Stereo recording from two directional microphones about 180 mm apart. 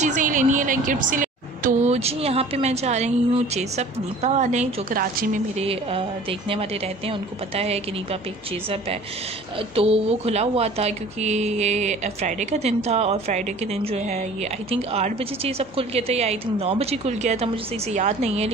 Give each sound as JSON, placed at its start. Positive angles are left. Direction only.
{"t": 0.0, "sound": "a woman's voice", "side_deg": -45}
{"t": 5.7, "sound": "a woman's voice", "side_deg": -30}
{"t": 7.1, "sound": "a woman's voice", "side_deg": -35}
{"t": 9.8, "sound": "a woman's voice", "side_deg": -35}
{"t": 14.7, "sound": "a woman's voice", "side_deg": -35}